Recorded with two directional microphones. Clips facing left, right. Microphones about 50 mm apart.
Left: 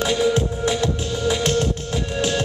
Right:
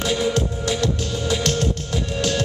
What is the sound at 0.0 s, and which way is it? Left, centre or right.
Music, centre.